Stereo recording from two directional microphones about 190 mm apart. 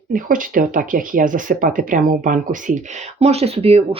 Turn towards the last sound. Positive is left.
turn(degrees=-30)  # may be behind; listen again after turning